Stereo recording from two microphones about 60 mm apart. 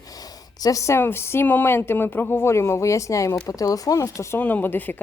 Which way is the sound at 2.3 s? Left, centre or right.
Left.